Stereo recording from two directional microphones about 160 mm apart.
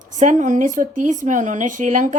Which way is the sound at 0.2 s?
50° right (ahead or behind).